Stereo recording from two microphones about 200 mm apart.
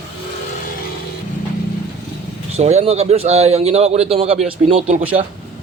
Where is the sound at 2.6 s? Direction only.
35° right (ahead or behind).